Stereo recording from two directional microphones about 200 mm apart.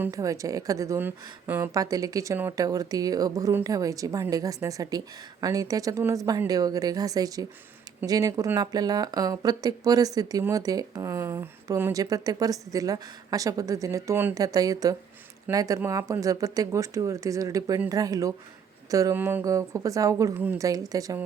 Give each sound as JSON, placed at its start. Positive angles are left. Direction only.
{"t": 0.0, "sound": "a woman's voice", "side_deg": -15}